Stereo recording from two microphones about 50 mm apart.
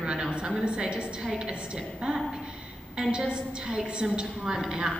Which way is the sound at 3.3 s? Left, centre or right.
Centre.